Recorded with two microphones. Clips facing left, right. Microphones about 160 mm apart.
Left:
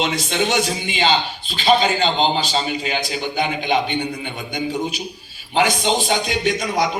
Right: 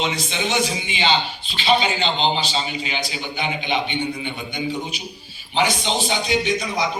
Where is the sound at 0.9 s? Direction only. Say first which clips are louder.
Left 2 dB; 45° left (ahead or behind).